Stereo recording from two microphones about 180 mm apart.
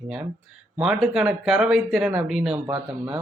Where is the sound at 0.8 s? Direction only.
5° right (ahead or behind).